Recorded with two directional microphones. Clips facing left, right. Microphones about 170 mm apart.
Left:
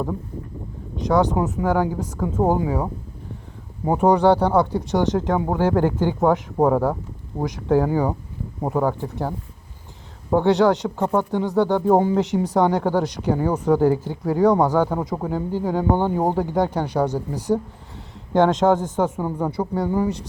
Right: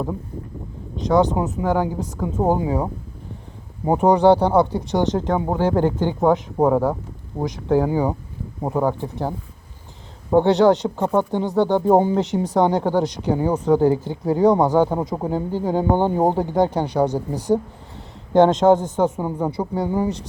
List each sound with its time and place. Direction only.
1.1 s speech: 20° right (ahead or behind)
10.4 s speech: 25° right (ahead or behind)
18.3 s speech: 25° right (ahead or behind)